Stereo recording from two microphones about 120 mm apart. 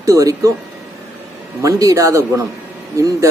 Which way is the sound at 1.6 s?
30° right (ahead or behind).